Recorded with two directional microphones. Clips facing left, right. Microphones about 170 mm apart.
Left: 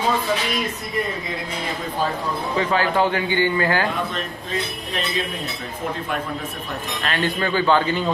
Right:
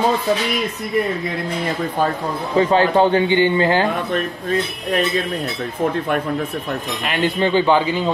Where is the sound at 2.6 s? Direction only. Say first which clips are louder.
Right 6 dB; 30° right (ahead or behind).